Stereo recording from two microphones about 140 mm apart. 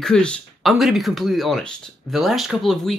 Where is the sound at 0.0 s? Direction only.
5° left (ahead or behind).